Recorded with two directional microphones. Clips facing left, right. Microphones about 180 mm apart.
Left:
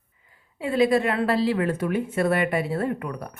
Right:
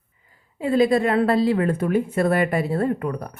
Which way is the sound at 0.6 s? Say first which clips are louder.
Right 2 dB; 35° right (ahead or behind).